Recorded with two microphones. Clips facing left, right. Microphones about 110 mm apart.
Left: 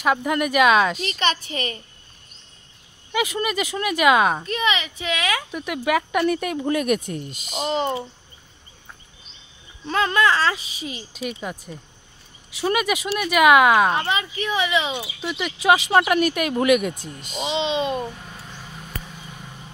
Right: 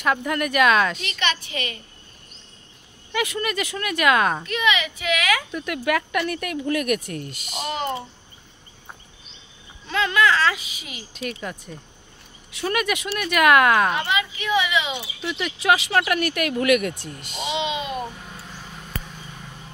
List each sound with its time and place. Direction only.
0.0 s speech: 15° left (ahead or behind)
1.0 s a woman's voice: 35° left (ahead or behind)
3.1 s speech: 15° left (ahead or behind)
4.5 s a woman's voice: 30° left (ahead or behind)
5.5 s speech: 10° left (ahead or behind)
9.8 s a woman's voice: 35° left (ahead or behind)
11.4 s speech: 10° left (ahead or behind)
13.9 s a woman's voice: 35° left (ahead or behind)
15.2 s speech: 10° left (ahead or behind); by 18.0 s 30° left (ahead or behind)